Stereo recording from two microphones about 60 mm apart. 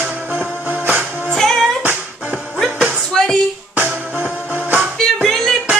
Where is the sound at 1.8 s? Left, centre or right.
Right.